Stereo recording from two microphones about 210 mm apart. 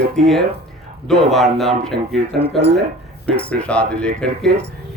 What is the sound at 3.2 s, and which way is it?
Speech, 5° left (ahead or behind).